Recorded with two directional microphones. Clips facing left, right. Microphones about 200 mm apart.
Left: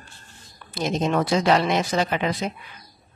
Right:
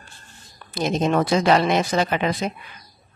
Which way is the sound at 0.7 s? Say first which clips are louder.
Right 2 dB; 50° right (ahead or behind).